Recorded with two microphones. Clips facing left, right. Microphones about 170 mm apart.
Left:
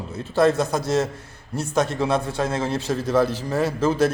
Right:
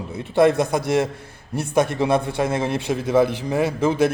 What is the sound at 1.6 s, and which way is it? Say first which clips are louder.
Speech: right 3 dB; 60° right (ahead or behind).